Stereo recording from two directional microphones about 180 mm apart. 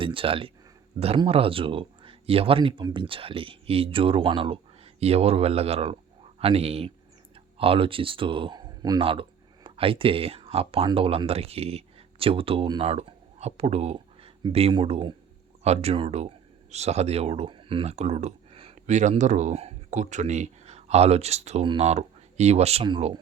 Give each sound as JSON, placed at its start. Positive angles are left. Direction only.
{"t": 0.0, "sound": "speech", "side_deg": -30}